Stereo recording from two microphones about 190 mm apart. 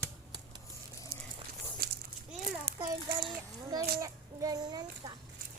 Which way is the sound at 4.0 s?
20° right (ahead or behind).